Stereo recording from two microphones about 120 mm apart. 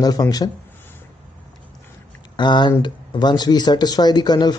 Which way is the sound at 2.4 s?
40° left (ahead or behind).